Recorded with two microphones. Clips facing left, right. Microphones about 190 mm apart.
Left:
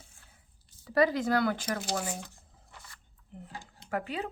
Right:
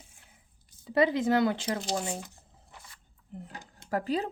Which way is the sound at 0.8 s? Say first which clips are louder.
Right 1 dB; 20° right (ahead or behind).